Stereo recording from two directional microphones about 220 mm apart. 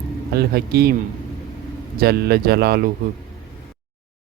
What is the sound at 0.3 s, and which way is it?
Speech, 45° right (ahead or behind).